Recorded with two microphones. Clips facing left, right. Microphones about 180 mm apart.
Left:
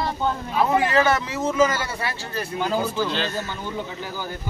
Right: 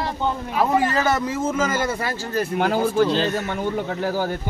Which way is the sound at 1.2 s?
50° right (ahead or behind).